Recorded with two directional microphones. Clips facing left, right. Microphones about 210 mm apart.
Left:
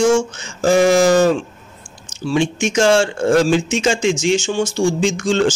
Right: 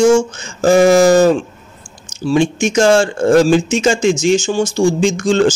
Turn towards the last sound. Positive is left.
turn(degrees=-40)  # may be behind; listen again after turning